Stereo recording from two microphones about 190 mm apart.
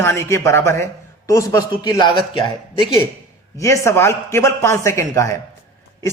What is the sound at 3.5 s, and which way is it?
A man's voice, 15° left (ahead or behind).